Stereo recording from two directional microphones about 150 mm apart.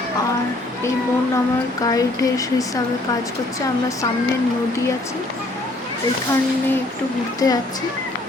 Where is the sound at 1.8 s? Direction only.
25° left (ahead or behind).